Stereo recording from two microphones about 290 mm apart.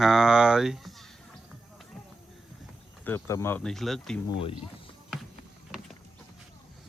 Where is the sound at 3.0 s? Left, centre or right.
Centre.